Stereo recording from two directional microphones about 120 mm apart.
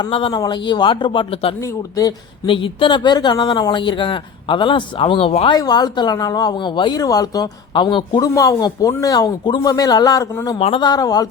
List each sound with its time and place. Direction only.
0.1 s speech: 45° left (ahead or behind)
5.5 s speech: 35° left (ahead or behind)
8.3 s speech: 30° left (ahead or behind)